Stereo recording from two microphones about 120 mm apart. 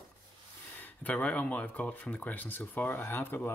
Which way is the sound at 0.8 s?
10° left (ahead or behind).